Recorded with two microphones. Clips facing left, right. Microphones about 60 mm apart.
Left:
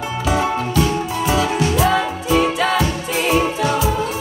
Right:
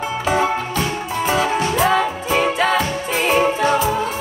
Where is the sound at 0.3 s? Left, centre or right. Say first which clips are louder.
Even; right.